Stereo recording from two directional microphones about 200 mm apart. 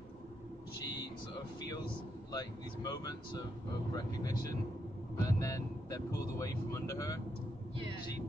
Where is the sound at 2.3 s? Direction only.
20° left (ahead or behind).